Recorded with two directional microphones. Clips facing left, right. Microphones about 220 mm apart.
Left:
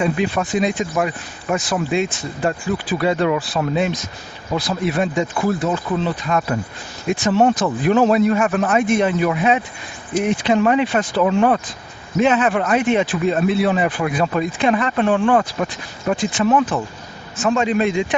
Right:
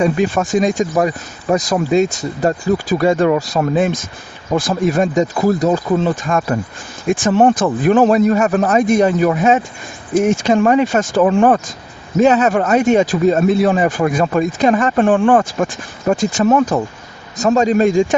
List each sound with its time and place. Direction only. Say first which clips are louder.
0.0 s a man's voice: right 4 dB; 45° right (ahead or behind)